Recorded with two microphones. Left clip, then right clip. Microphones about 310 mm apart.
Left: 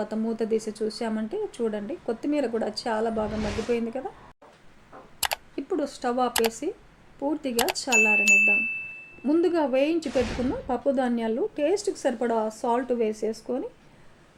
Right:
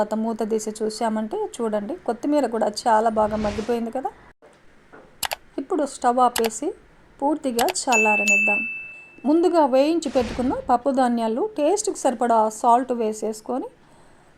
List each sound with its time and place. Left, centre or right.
0.0 s speech: right
3.2 s music: centre
5.2 s typing: centre
5.5 s speech: centre
7.5 s music: centre
9.2 s speech: right
10.1 s music: centre
10.7 s speech: right